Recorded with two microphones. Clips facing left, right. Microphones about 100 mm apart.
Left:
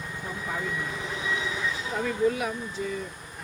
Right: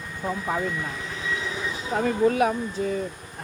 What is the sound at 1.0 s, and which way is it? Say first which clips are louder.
Train: even; 15° left (ahead or behind).